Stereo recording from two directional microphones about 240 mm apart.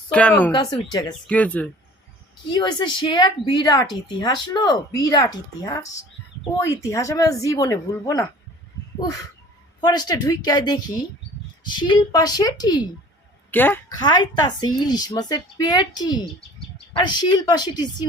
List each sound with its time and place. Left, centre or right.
0.1 s speech: centre
0.5 s a woman's voice: centre
1.3 s speech: centre
2.5 s a woman's voice: centre
9.8 s a woman's voice: centre